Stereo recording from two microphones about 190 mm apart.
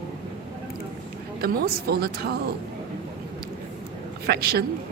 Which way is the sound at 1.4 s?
55° right (ahead or behind).